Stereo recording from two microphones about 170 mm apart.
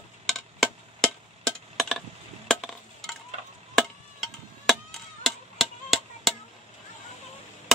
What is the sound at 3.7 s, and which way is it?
Chop, centre (ahead or behind).